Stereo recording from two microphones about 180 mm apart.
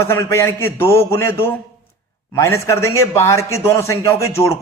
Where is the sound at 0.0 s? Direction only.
15° left (ahead or behind).